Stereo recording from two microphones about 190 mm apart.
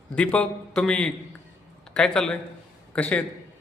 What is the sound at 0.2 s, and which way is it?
A man's voice, 5° left (ahead or behind).